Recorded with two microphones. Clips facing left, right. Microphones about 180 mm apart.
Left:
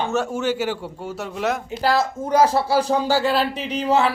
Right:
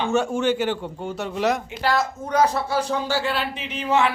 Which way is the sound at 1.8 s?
30° left (ahead or behind).